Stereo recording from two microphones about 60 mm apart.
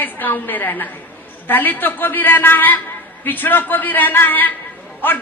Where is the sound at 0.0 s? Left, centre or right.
Left.